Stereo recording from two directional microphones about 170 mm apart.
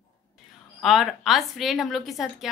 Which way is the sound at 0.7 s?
Centre (ahead or behind).